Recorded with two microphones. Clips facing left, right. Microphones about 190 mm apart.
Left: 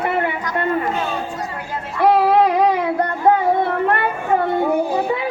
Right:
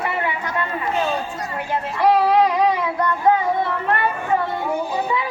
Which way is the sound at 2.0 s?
55° left (ahead or behind).